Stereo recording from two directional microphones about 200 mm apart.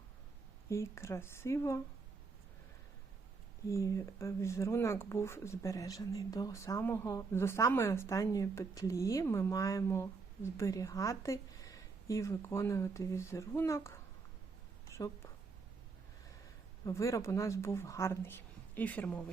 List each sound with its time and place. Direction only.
0.7 s speech: 15° left (ahead or behind)
3.7 s speech: 15° left (ahead or behind)
14.8 s a sound: 15° left (ahead or behind)
16.8 s speech: 15° left (ahead or behind)